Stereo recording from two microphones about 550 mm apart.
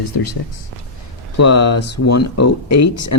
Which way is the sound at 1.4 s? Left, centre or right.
Left.